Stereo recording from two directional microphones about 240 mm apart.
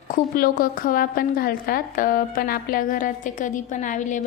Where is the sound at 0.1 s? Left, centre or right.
Left.